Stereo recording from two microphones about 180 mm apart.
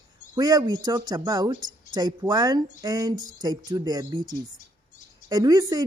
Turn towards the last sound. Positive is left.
turn(degrees=-20)  # may be behind; listen again after turning